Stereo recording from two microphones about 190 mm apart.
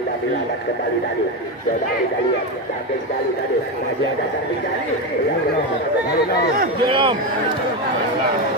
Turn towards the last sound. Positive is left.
turn(degrees=-25)  # may be behind; listen again after turning